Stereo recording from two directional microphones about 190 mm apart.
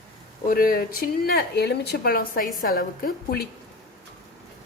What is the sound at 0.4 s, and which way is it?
Speech, 50° left (ahead or behind).